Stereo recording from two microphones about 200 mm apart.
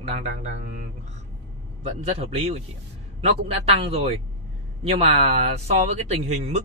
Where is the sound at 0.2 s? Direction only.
35° right (ahead or behind).